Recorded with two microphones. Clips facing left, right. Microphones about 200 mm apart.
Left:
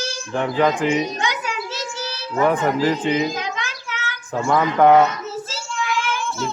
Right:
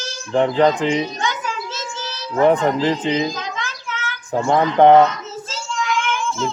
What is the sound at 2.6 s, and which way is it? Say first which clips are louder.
Speech: right 1 dB; 20° right (ahead or behind).